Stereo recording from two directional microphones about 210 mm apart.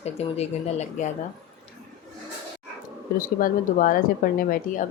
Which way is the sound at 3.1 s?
40° left (ahead or behind).